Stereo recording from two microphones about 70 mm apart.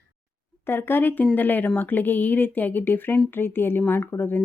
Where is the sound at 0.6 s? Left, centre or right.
Left.